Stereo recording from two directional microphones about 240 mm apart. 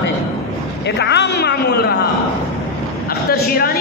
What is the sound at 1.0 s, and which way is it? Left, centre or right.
Speech, left.